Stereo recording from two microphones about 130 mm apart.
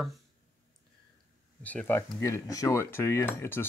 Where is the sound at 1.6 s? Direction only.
10° left (ahead or behind).